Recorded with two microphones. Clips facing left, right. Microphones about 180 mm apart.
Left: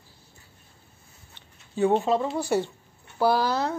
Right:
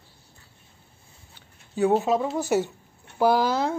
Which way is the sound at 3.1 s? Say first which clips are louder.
Right 2 dB; 15° right (ahead or behind).